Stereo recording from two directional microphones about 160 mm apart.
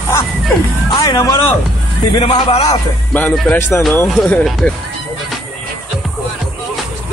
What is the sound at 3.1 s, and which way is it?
Speech, 5° left (ahead or behind).